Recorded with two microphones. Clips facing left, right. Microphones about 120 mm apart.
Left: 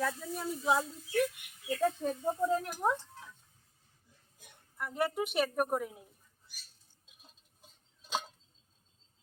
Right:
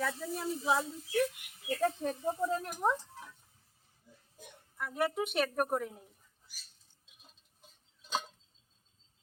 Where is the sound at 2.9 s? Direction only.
10° right (ahead or behind).